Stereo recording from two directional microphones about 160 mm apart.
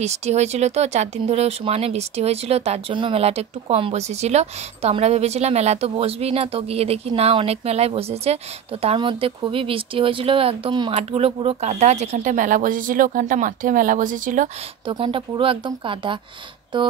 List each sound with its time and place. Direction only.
0.0 s speech: 45° right (ahead or behind)
14.9 s speech: 35° right (ahead or behind)
16.7 s a sound: 30° right (ahead or behind)